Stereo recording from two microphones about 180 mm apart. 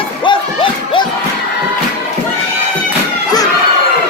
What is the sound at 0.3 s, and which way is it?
Crowd, 25° left (ahead or behind).